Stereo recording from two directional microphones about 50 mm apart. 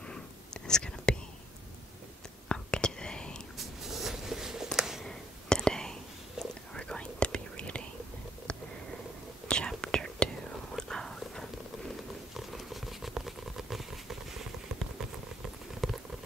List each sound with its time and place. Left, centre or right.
0.7 s whispering: centre
2.4 s whispering: centre
3.5 s a sound: centre
5.0 s whispering: centre
8.5 s a sound: centre
9.5 s whispering: centre
10.8 s a sound: centre
12.4 s patter: centre
15.8 s boiling: centre